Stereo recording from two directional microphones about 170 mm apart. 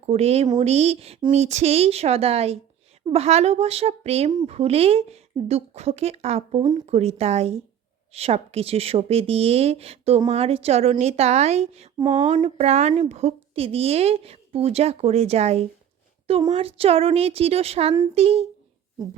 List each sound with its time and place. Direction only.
0.0 s a woman's voice: 35° right (ahead or behind)
11.9 s speech: 25° right (ahead or behind)
12.3 s a woman's voice: 40° right (ahead or behind)